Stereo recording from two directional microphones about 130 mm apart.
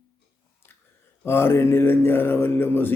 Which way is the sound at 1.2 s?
20° left (ahead or behind).